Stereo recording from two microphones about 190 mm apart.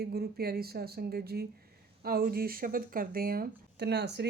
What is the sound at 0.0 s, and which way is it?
Speech, 55° right (ahead or behind).